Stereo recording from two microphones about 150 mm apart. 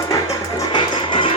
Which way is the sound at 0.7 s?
35° left (ahead or behind).